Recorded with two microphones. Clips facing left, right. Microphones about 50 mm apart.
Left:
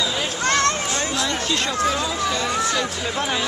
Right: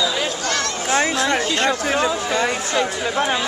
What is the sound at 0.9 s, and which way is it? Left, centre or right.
Speech, right.